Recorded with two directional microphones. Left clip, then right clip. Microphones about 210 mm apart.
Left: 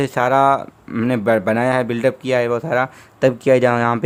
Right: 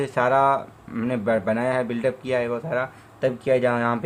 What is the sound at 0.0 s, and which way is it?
A man's voice, 50° left (ahead or behind).